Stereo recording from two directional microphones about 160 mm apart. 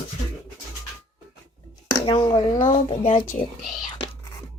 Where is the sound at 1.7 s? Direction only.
30° left (ahead or behind).